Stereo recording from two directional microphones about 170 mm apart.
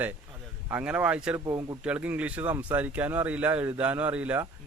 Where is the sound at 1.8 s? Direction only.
10° right (ahead or behind).